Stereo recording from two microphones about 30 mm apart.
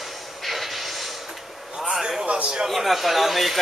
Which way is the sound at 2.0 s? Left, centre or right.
Centre.